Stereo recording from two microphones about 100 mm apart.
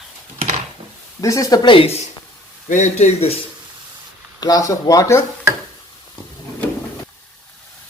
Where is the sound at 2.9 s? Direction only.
90° left.